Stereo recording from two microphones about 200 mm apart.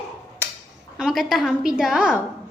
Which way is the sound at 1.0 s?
Centre (ahead or behind).